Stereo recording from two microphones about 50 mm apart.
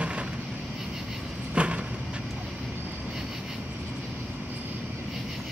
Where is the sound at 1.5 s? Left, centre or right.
Right.